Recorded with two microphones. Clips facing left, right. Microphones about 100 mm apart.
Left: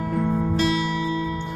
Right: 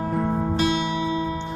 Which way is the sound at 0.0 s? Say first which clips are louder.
Even; 30° right (ahead or behind).